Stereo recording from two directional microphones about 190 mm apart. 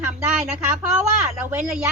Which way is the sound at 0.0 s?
5° right (ahead or behind).